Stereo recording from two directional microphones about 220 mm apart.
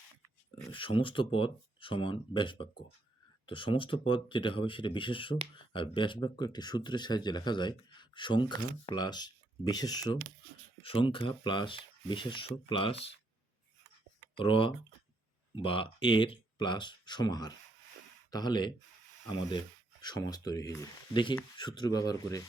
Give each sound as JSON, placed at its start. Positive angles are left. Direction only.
{"t": 0.7, "sound": "speech", "side_deg": 20}
{"t": 14.3, "sound": "speech", "side_deg": 25}